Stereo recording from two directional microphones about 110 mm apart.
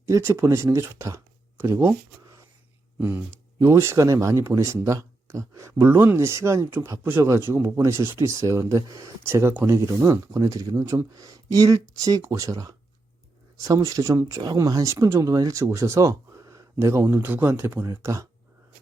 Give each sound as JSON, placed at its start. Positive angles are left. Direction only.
{"t": 0.1, "sound": "speech", "side_deg": -25}